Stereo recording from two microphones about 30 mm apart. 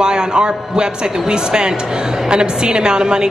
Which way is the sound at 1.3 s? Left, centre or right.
Right.